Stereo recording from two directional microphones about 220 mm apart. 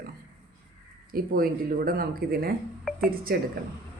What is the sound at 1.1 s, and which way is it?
Speech, 40° right (ahead or behind).